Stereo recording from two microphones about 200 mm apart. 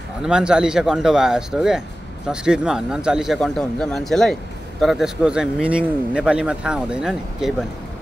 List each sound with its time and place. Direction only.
0.2 s speech: 5° right (ahead or behind)